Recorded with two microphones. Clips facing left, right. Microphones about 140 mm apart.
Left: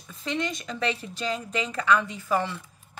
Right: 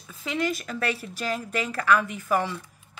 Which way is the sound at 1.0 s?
20° left (ahead or behind).